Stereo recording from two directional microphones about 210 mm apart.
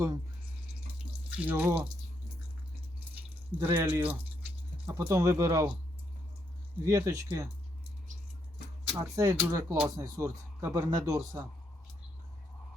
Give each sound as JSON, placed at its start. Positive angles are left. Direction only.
{"t": 1.3, "sound": "speech", "side_deg": -10}
{"t": 3.2, "sound": "speech", "side_deg": -10}
{"t": 6.8, "sound": "speech", "side_deg": -15}
{"t": 8.9, "sound": "speech", "side_deg": -10}